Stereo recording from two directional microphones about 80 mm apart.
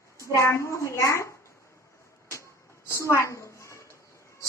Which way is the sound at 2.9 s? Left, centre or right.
Left.